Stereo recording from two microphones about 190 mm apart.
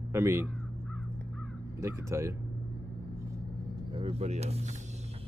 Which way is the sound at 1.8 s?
15° right (ahead or behind).